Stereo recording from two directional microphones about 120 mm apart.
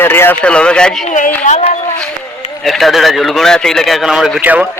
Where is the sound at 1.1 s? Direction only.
85° left.